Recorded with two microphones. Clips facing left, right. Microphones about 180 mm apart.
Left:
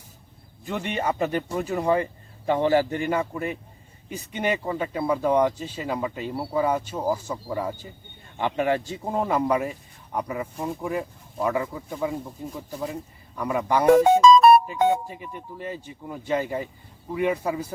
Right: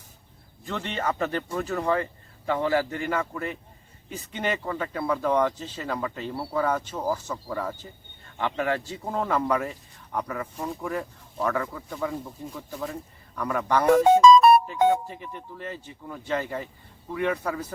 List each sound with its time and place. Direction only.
0.6 s a man's voice: 15° left (ahead or behind)